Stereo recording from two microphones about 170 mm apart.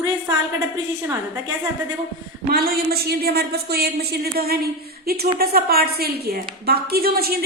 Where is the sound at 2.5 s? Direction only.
65° right (ahead or behind).